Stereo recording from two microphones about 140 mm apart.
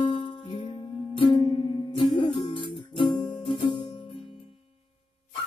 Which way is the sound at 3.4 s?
35° left (ahead or behind).